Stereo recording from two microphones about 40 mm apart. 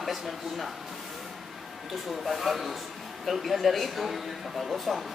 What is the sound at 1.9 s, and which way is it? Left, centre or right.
Speech, centre.